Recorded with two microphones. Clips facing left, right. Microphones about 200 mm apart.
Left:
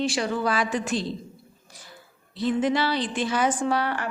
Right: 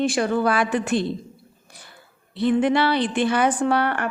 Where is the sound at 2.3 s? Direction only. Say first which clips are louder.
Right 4 dB; 60° right (ahead or behind).